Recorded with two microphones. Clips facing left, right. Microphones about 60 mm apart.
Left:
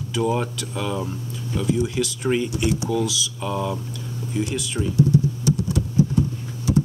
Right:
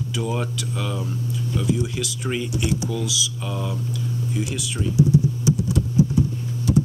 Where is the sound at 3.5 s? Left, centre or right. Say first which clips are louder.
Left 7 dB; centre.